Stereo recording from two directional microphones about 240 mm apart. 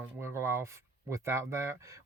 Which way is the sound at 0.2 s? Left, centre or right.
Centre.